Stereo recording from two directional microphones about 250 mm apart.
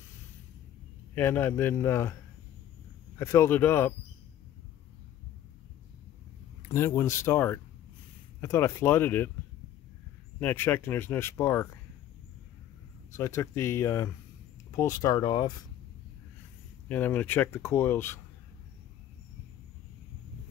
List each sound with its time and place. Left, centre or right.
1.1 s speech: centre
3.2 s speech: centre
6.7 s speech: centre
10.4 s speech: centre
13.1 s speech: centre
16.9 s speech: centre